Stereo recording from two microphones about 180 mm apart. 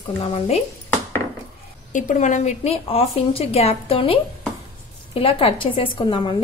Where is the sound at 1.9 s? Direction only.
45° left (ahead or behind).